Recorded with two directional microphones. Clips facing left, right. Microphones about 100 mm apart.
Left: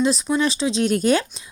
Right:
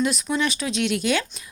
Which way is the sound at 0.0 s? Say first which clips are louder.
Left 4 dB; 30° left (ahead or behind).